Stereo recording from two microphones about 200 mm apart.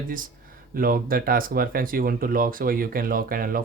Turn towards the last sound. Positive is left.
turn(degrees=-45)  # may be behind; listen again after turning